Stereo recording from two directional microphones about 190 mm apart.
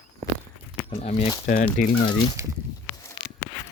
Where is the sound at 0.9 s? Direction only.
30° left (ahead or behind).